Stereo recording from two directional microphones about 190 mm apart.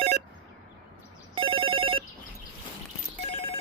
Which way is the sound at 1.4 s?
30° right (ahead or behind).